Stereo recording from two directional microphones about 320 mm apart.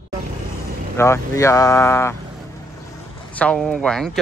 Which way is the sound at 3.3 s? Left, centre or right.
Centre.